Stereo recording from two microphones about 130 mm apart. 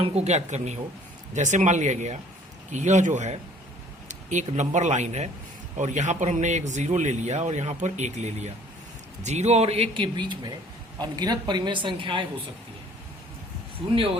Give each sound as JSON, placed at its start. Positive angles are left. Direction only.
{"t": 0.0, "sound": "a man's voice", "side_deg": -50}
{"t": 5.7, "sound": "a man's voice", "side_deg": -70}